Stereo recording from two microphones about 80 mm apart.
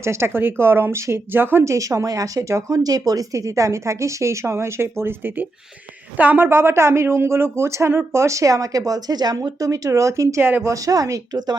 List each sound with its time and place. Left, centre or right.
0.0 s a woman's voice: right
1.6 s a woman's voice: right
10.4 s a woman's voice: right
10.8 s speech: right